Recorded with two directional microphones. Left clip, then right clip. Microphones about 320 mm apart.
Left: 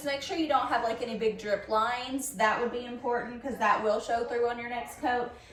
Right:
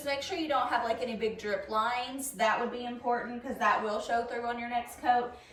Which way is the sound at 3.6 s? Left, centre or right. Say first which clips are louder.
Left 2 dB; centre.